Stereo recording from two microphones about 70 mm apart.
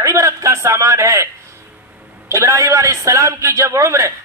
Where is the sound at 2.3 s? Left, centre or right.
Right.